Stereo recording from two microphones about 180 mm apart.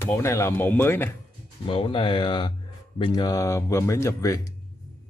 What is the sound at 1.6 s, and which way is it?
Speech, 30° left (ahead or behind).